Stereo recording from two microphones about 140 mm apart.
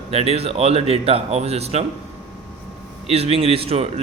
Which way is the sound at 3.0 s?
45° right (ahead or behind).